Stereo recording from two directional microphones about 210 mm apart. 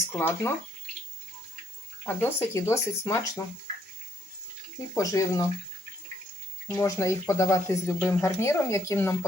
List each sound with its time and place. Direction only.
0.2 s speech: 10° left (ahead or behind)
2.0 s speech: 15° left (ahead or behind)
4.9 s speech: 15° left (ahead or behind)
6.7 s speech: 15° left (ahead or behind)